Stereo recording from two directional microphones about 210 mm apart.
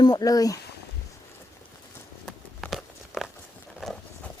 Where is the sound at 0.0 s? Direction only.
20° left (ahead or behind).